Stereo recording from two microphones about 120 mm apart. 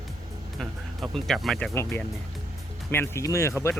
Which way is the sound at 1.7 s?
20° left (ahead or behind).